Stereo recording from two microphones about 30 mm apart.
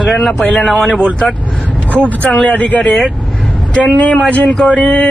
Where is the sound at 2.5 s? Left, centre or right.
Left.